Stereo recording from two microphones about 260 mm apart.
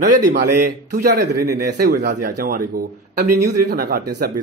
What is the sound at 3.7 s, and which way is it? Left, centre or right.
Speech, right.